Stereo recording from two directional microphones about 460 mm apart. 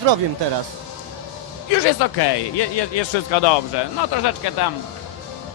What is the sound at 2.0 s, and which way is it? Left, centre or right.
A man's voice, left.